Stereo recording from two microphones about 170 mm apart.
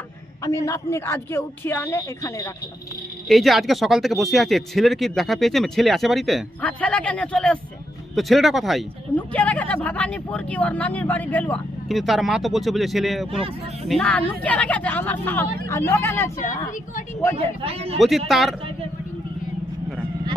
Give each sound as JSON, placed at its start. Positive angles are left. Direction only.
{"t": 0.4, "sound": "speech", "side_deg": 20}
{"t": 3.3, "sound": "speech", "side_deg": 0}
{"t": 17.4, "sound": "speech", "side_deg": -35}
{"t": 17.9, "sound": "speech", "side_deg": 0}